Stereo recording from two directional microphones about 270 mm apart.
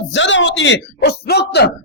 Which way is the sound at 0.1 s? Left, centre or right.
Left.